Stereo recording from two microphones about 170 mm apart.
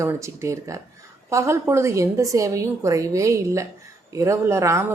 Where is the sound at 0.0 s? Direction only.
15° right (ahead or behind).